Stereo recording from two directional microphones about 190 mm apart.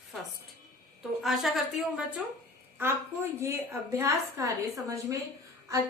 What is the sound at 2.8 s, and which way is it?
A woman's voice, 15° right (ahead or behind).